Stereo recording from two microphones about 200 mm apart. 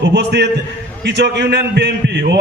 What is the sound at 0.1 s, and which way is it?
A man's voice, 60° right (ahead or behind).